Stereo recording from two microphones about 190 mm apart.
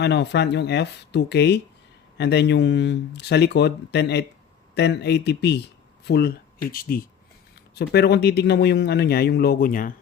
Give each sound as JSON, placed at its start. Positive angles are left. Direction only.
{"t": 0.0, "sound": "speech", "side_deg": 65}